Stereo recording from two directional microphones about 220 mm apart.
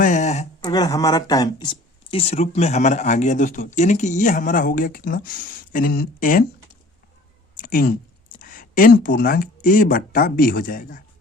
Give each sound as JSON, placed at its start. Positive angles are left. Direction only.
{"t": 0.0, "sound": "speech", "side_deg": 35}
{"t": 0.6, "sound": "speech", "side_deg": 20}
{"t": 7.5, "sound": "a sound", "side_deg": 40}
{"t": 8.4, "sound": "speech", "side_deg": 40}